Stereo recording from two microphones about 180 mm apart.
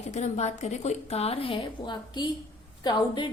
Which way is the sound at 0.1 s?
40° left (ahead or behind).